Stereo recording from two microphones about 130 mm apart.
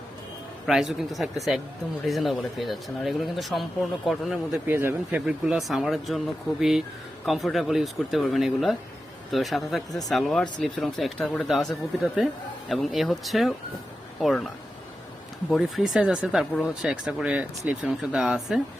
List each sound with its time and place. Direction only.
0.7 s speech: centre (ahead or behind)
4.6 s speech: 15° right (ahead or behind)
5.2 s speech: 5° right (ahead or behind)